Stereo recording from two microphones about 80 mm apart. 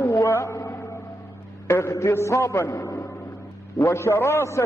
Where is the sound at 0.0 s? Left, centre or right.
Left.